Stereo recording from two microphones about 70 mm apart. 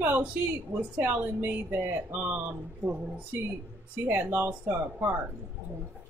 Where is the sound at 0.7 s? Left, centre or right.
Right.